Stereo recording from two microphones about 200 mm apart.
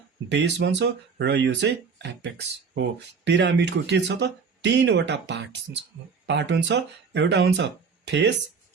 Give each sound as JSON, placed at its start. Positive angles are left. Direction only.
{"t": 0.3, "sound": "speech", "side_deg": -60}